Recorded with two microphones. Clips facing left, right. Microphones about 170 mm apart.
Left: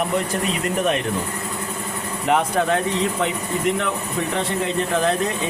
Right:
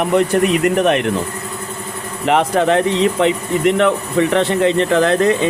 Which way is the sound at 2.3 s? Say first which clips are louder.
Right 5 dB; 85° right.